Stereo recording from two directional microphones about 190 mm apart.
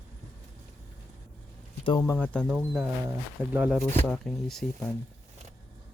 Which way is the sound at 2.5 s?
10° right (ahead or behind).